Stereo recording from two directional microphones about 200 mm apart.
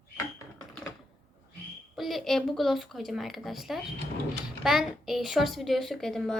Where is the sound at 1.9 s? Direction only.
Centre (ahead or behind).